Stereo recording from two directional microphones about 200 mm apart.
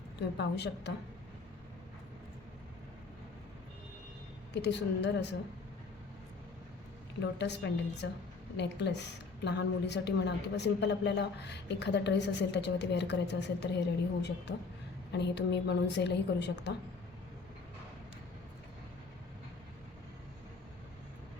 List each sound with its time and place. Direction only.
0.3 s a woman's voice: 55° left (ahead or behind)
4.5 s a woman's voice: 60° left (ahead or behind)
7.2 s a woman's voice: 60° left (ahead or behind)